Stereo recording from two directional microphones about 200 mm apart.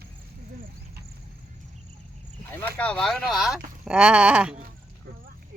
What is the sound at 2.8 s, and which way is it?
Speech, 5° left (ahead or behind).